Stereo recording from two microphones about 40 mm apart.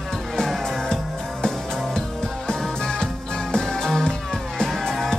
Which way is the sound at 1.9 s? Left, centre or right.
Centre.